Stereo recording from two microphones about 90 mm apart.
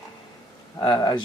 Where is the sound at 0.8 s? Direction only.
45° left (ahead or behind).